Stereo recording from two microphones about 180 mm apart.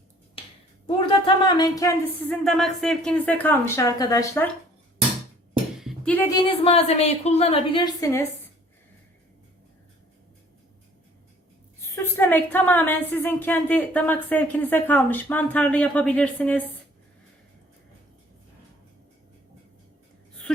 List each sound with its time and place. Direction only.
1.0 s speech: 25° left (ahead or behind)
2.3 s a woman's voice: centre (ahead or behind); by 4.4 s 20° left (ahead or behind)
5.8 s music: centre (ahead or behind)
6.1 s a woman's voice: 20° left (ahead or behind)
8.0 s a woman's voice: 15° left (ahead or behind)
12.1 s a woman's voice: 10° left (ahead or behind)